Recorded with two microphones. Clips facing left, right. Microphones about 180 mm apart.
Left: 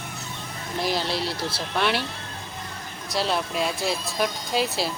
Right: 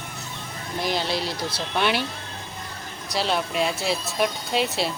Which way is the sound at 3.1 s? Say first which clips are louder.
Even; centre (ahead or behind).